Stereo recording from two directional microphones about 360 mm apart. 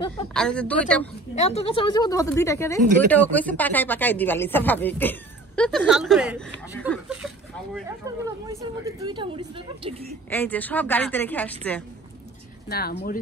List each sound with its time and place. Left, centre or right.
0.3 s speech: centre
1.3 s a woman's voice: centre
10.3 s speech: centre
12.6 s speech: left